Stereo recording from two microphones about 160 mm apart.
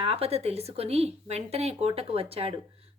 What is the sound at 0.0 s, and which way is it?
Speech, 40° right (ahead or behind).